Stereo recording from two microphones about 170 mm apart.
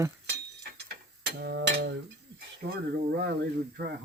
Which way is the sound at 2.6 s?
65° right (ahead or behind).